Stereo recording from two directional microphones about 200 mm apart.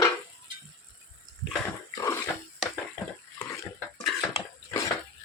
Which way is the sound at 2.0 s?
15° left (ahead or behind).